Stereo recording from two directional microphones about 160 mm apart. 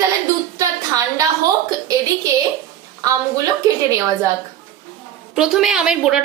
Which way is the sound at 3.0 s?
20° right (ahead or behind).